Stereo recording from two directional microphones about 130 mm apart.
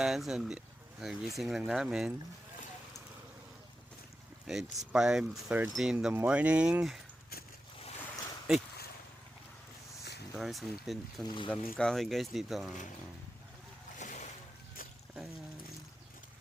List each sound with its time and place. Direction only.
0.0 s speech: 5° right (ahead or behind)
4.4 s speech: 5° right (ahead or behind)
10.3 s speech: centre (ahead or behind)
14.0 s a sound: 70° left (ahead or behind)